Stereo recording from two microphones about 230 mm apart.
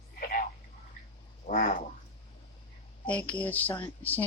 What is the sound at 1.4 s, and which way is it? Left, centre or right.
Speech, left.